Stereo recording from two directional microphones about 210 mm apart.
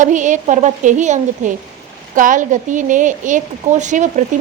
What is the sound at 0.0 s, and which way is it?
A woman's voice, 35° right (ahead or behind).